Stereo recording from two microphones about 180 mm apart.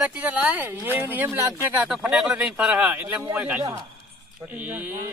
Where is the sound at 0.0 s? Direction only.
5° right (ahead or behind).